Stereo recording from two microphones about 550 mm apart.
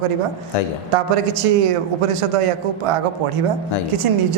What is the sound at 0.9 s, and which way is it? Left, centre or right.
A man's voice, right.